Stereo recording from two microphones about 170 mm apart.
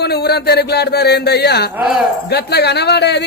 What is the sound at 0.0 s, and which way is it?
Speech, 70° left (ahead or behind).